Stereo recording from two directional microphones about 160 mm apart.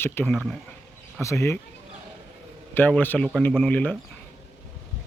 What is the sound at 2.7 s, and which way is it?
Speech, 10° left (ahead or behind).